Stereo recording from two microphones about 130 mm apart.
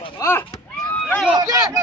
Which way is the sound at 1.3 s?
25° right (ahead or behind).